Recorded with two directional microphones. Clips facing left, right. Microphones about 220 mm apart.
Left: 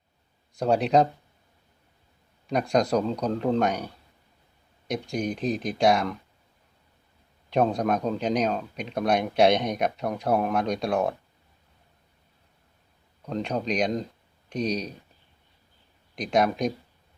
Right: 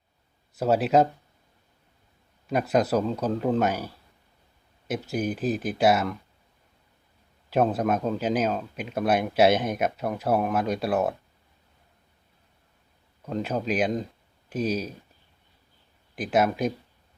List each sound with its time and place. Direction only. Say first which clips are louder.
0.5 s speech: even; 5° right (ahead or behind)
2.5 s speech: even; 5° right (ahead or behind)
7.5 s speech: even; 5° right (ahead or behind)
13.2 s speech: even; 5° right (ahead or behind)
16.1 s speech: even; 5° right (ahead or behind)